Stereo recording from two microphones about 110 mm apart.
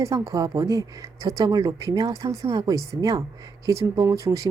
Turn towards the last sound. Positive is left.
turn(degrees=-30)  # may be behind; listen again after turning